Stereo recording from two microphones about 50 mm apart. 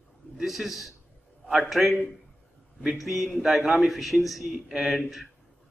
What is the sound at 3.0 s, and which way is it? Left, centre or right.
A man's voice, centre.